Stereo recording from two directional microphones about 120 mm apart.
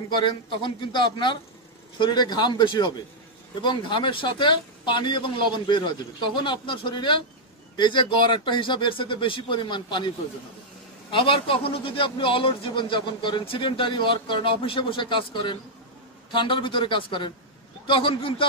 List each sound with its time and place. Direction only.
0.2 s a man's voice: 40° left (ahead or behind)